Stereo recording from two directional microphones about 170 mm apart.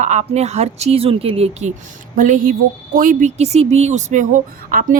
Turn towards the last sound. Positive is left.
turn(degrees=-50)  # may be behind; listen again after turning